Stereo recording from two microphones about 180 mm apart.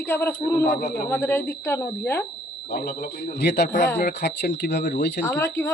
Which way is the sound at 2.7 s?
55° left (ahead or behind).